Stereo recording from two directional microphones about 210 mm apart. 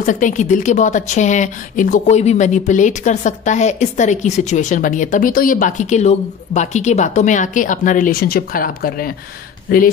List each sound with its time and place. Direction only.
0.0 s a woman's voice: 35° left (ahead or behind)